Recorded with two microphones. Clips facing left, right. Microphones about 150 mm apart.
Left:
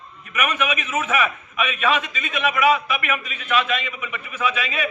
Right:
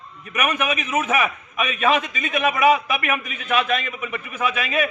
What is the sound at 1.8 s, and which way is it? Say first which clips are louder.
A man's voice: right 3 dB; 45° right (ahead or behind).